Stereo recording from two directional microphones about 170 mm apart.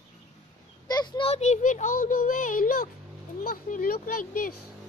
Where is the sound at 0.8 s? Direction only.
25° left (ahead or behind).